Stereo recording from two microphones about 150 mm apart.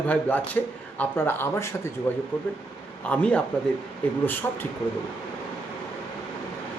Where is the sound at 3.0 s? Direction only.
10° left (ahead or behind).